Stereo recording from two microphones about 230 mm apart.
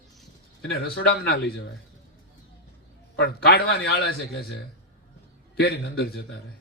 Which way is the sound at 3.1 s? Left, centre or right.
Left.